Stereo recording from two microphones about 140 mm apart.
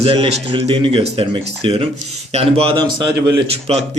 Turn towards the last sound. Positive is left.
turn(degrees=-45)  # may be behind; listen again after turning